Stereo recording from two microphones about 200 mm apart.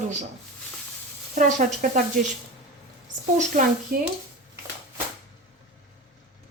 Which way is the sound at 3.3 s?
45° right (ahead or behind).